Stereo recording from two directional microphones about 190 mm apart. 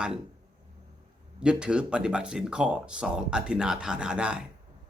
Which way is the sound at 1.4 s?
5° right (ahead or behind).